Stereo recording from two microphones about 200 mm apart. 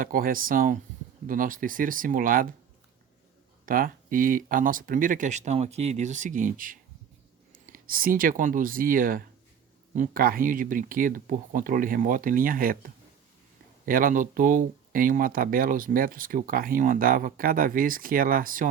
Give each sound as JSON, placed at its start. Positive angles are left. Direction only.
{"t": 0.0, "sound": "speech", "side_deg": -45}
{"t": 3.7, "sound": "speech", "side_deg": -45}